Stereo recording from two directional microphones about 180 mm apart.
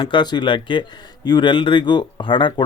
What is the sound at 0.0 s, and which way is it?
Speech, 25° left (ahead or behind).